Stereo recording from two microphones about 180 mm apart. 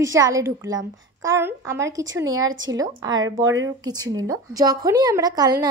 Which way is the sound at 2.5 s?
90° right.